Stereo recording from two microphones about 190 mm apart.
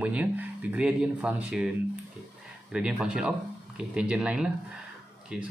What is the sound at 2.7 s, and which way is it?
Speech, 5° right (ahead or behind).